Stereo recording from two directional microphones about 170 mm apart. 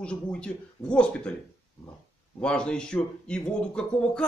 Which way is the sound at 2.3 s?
5° left (ahead or behind).